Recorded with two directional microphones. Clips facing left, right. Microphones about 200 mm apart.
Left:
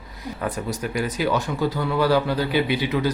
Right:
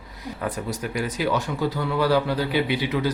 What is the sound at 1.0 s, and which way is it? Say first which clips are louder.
Speech: left 1 dB; 45° left (ahead or behind).